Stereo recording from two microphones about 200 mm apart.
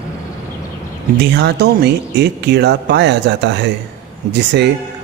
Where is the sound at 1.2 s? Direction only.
55° right (ahead or behind).